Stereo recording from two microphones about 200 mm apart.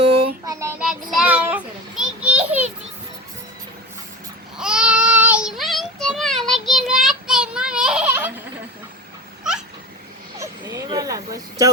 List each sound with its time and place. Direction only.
0.4 s child singing: 15° right (ahead or behind)
0.8 s children playing: 5° right (ahead or behind)
4.5 s child singing: 5° right (ahead or behind)
9.4 s cat: 5° right (ahead or behind)
10.3 s a sound: 15° right (ahead or behind)